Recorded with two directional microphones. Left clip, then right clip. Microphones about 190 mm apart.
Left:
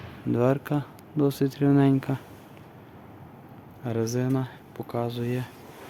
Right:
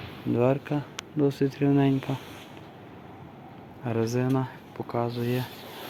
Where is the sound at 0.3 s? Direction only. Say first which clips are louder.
Even; 20° left (ahead or behind).